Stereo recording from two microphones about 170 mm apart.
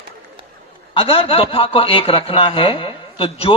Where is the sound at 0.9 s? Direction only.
30° left (ahead or behind).